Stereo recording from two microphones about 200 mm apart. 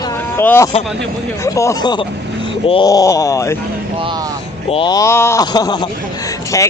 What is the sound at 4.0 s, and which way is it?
Speech, 25° right (ahead or behind).